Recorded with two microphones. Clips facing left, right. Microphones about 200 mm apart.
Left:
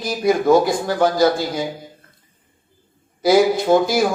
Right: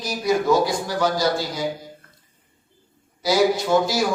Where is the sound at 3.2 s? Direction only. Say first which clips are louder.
Left 5 dB; 55° left (ahead or behind).